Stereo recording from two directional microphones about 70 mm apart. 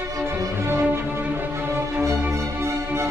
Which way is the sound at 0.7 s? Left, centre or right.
Right.